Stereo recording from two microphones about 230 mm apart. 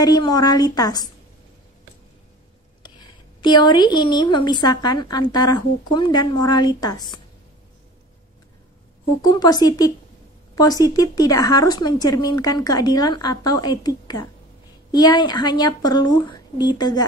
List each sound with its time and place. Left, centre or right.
0.0 s speech: centre
3.3 s a woman's voice: centre
9.2 s speech: centre